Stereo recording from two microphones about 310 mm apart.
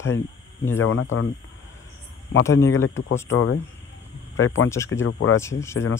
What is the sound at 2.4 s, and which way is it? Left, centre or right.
Speech, centre.